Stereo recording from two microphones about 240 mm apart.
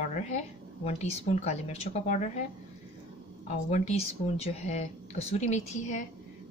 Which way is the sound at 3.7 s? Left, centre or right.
Left.